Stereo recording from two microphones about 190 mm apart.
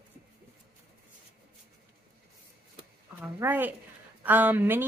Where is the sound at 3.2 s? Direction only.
10° right (ahead or behind).